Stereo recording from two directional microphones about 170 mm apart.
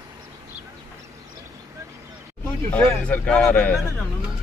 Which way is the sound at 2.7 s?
5° left (ahead or behind).